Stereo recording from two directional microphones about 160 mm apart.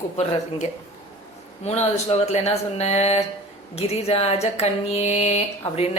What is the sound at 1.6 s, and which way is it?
Speech, 45° left (ahead or behind).